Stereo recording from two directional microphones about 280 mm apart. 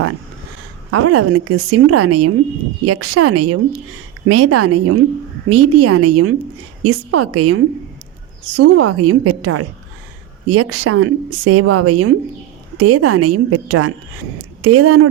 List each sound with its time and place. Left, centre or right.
0.9 s a woman's voice: right